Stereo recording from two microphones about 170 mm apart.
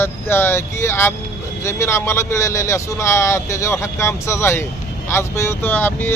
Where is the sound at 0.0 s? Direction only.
15° left (ahead or behind).